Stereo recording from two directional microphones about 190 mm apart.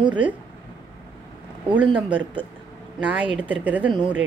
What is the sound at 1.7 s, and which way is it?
A woman's voice, 5° right (ahead or behind).